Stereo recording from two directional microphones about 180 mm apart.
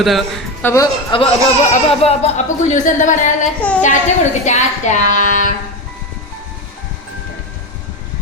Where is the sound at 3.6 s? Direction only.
10° left (ahead or behind).